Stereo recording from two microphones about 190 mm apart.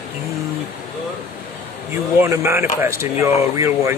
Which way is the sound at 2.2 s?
15° right (ahead or behind).